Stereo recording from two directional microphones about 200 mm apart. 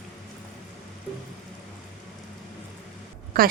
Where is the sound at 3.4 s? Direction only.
45° right (ahead or behind).